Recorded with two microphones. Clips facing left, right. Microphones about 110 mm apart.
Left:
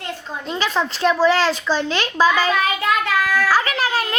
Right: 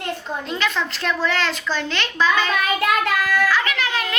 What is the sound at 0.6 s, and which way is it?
A child's voice, 35° left (ahead or behind).